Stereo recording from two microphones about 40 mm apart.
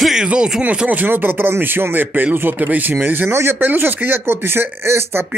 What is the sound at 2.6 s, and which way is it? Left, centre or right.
Speech, right.